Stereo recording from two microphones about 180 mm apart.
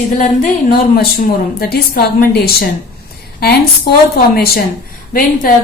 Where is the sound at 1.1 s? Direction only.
55° left (ahead or behind).